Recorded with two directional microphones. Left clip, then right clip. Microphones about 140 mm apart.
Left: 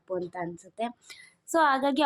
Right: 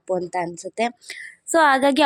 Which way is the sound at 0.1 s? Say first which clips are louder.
Right 9 dB; 35° right (ahead or behind).